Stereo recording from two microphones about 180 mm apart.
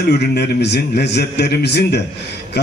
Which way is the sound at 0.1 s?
70° left (ahead or behind).